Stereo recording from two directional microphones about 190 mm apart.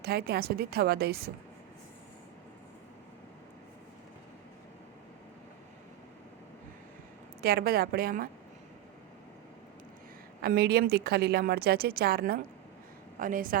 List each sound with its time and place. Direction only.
0.0 s a woman's voice: 55° right (ahead or behind)
7.4 s a woman's voice: 55° right (ahead or behind)
10.4 s a woman's voice: 55° right (ahead or behind)